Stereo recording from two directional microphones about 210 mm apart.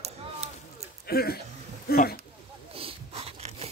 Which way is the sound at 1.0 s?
45° left (ahead or behind).